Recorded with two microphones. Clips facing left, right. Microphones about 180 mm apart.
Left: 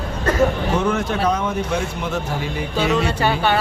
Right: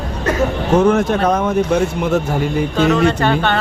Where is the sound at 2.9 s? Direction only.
10° left (ahead or behind).